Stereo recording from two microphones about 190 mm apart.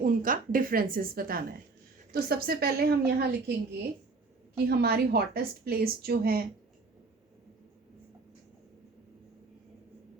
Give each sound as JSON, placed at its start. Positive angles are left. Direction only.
{"t": 0.0, "sound": "a woman's voice", "side_deg": -45}
{"t": 4.5, "sound": "a woman's voice", "side_deg": -55}